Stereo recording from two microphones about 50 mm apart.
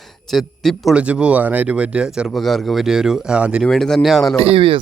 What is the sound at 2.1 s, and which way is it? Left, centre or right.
Speech, centre.